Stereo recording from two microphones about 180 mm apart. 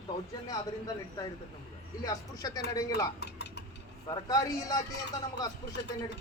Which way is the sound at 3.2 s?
70° left (ahead or behind).